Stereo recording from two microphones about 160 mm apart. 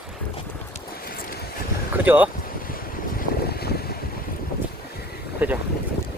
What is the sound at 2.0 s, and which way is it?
Speech, 10° right (ahead or behind).